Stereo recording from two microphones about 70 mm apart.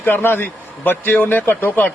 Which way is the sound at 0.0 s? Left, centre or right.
Left.